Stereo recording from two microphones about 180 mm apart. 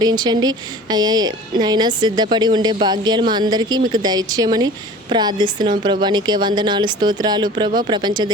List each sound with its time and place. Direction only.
0.0 s a woman's voice: 25° right (ahead or behind)